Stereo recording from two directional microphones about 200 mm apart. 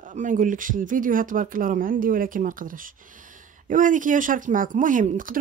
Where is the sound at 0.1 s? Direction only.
40° right (ahead or behind).